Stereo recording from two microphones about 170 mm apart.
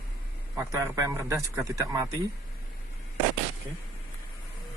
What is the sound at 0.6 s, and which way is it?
Speech, 15° right (ahead or behind).